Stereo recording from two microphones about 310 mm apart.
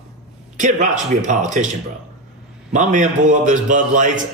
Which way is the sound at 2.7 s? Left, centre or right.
Right.